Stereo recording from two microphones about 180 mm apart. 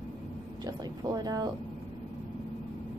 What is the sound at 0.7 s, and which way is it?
Speech, 20° right (ahead or behind).